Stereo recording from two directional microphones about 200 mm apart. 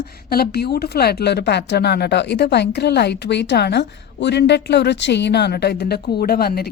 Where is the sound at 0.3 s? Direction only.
50° left (ahead or behind).